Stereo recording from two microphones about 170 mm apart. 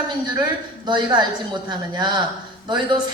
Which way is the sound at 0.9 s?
25° right (ahead or behind).